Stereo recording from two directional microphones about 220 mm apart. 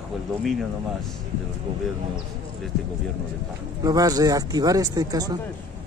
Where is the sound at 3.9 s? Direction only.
15° right (ahead or behind).